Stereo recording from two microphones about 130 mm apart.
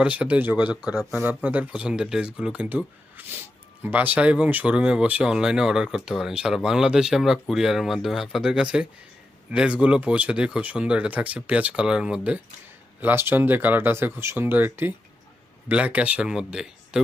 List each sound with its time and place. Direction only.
0.0 s speech: 10° right (ahead or behind)